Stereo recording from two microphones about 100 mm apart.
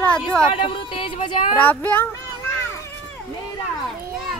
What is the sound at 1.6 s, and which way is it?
Speech, 15° left (ahead or behind).